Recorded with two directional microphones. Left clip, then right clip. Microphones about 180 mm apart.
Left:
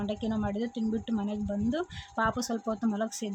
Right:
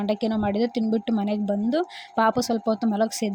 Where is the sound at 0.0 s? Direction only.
30° right (ahead or behind).